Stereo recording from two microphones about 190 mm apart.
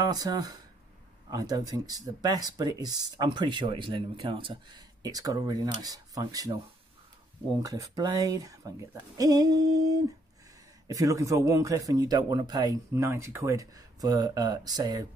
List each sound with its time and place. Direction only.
0.0 s speech: 20° right (ahead or behind)
7.6 s speech: 15° right (ahead or behind)